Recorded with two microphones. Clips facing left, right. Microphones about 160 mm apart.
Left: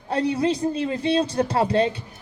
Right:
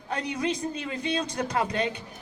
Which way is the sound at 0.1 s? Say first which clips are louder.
Left 7 dB; 30° left (ahead or behind).